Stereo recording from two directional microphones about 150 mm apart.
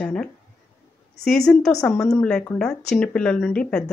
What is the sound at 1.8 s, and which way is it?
A woman's voice, 10° left (ahead or behind).